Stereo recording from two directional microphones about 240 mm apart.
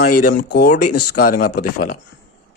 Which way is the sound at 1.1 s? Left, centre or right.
Left.